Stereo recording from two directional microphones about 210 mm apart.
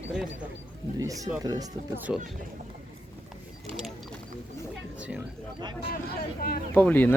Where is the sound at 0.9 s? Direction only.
15° right (ahead or behind).